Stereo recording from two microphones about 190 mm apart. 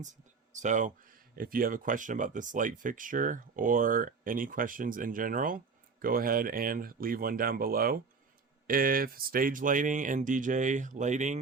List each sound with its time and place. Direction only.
0.0 s speech: 40° right (ahead or behind)